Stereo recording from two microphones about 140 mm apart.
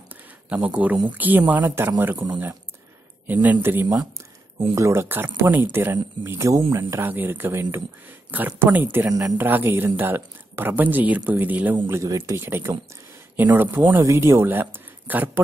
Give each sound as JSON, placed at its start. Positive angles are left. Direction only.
{"t": 0.5, "sound": "speech", "side_deg": -10}
{"t": 3.3, "sound": "speech", "side_deg": -15}